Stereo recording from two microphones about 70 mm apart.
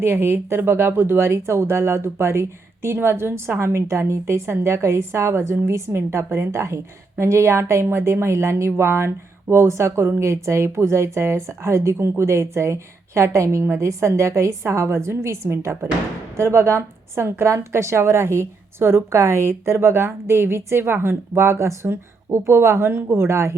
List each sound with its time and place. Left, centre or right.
0.0 s a woman's voice: right